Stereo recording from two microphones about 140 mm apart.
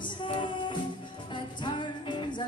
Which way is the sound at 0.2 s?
35° left (ahead or behind).